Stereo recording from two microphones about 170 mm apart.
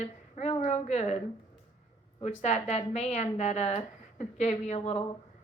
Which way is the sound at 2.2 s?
40° left (ahead or behind).